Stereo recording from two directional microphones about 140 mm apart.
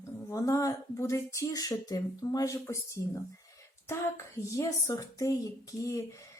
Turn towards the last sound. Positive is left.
turn(degrees=20)  # may be behind; listen again after turning